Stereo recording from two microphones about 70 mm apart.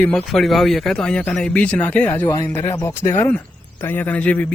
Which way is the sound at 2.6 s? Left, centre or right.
Left.